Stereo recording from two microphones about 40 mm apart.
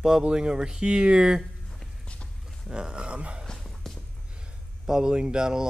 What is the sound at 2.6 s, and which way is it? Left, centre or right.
Speech, right.